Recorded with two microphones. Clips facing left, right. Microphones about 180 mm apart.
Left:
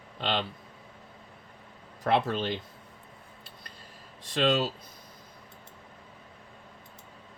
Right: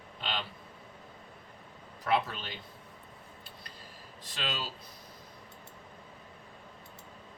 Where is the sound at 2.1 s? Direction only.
50° left (ahead or behind).